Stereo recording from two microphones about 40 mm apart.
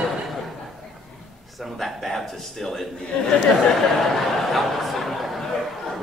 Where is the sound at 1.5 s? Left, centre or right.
Centre.